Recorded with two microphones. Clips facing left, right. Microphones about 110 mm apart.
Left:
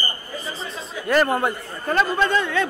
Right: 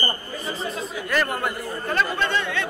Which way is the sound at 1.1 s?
35° left (ahead or behind).